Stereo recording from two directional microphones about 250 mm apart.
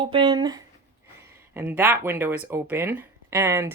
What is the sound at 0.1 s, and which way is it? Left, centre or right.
Speech, centre.